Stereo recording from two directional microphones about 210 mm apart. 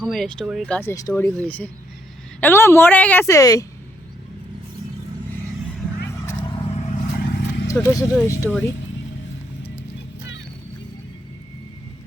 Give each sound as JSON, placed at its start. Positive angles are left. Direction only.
{"t": 0.0, "sound": "speech", "side_deg": 5}
{"t": 7.3, "sound": "a sound", "side_deg": 55}
{"t": 7.7, "sound": "speech", "side_deg": 15}